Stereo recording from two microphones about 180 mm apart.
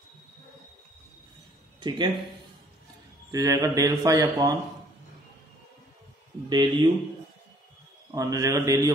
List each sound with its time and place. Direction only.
1.8 s speech: 25° right (ahead or behind)
3.3 s a man's voice: 20° right (ahead or behind)
6.5 s a man's voice: 25° right (ahead or behind)
8.1 s a man's voice: 20° right (ahead or behind)